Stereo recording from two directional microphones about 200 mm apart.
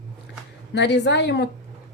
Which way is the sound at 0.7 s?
60° left (ahead or behind).